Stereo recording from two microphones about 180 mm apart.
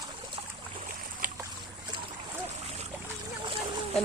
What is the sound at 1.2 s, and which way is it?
Boat, 50° right (ahead or behind).